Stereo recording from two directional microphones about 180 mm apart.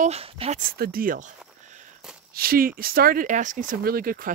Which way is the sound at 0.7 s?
55° right (ahead or behind).